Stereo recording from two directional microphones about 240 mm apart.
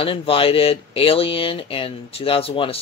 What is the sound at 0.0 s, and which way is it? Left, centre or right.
Speech, left.